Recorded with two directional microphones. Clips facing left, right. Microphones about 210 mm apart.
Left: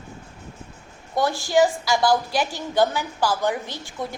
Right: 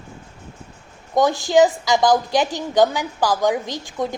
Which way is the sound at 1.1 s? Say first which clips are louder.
Right 4 dB; 15° right (ahead or behind).